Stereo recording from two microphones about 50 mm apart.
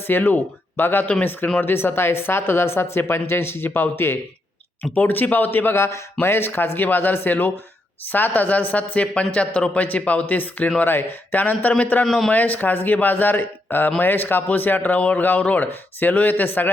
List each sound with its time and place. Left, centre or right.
0.1 s speech: left
12.0 s a man's voice: centre
12.3 s speech: left